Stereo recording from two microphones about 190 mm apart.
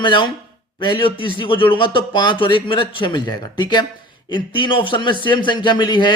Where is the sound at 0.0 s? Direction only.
25° left (ahead or behind).